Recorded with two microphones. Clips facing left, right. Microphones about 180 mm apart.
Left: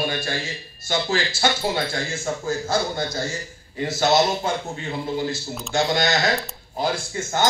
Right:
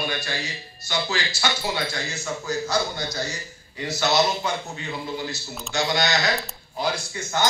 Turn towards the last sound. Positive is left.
turn(degrees=50)  # may be behind; listen again after turning